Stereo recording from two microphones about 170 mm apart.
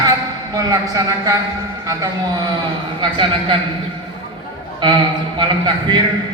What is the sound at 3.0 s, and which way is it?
Speech, 30° right (ahead or behind).